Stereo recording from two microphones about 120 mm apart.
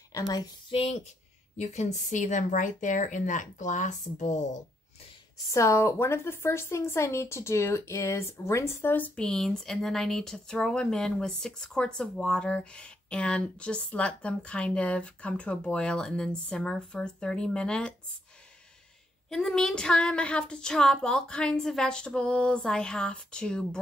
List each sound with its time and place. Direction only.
0.7 s speech: 55° left (ahead or behind)
1.6 s speech: 75° left (ahead or behind)
5.5 s a woman's voice: 25° left (ahead or behind); by 17.9 s 10° left (ahead or behind)
19.2 s a woman's voice: 5° left (ahead or behind)